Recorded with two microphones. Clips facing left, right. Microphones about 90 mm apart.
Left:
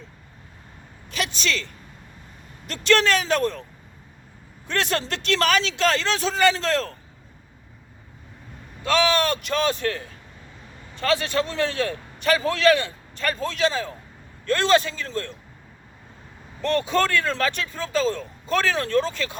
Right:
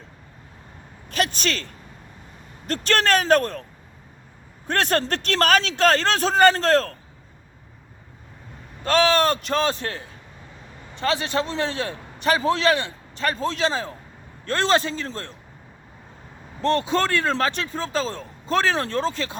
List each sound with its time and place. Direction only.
1.1 s a sound: 45° right (ahead or behind)
2.6 s a man's voice: 45° right (ahead or behind)
4.7 s a man's voice: 45° right (ahead or behind)
8.8 s a man's voice: 40° right (ahead or behind)
16.6 s speech: 25° right (ahead or behind)